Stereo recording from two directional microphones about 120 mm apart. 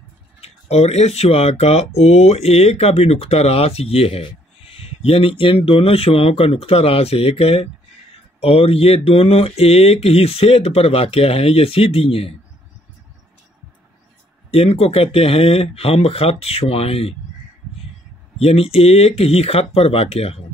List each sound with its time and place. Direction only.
0.4 s speech: 60° left (ahead or behind)
14.5 s speech: 55° left (ahead or behind)
18.4 s speech: 55° left (ahead or behind)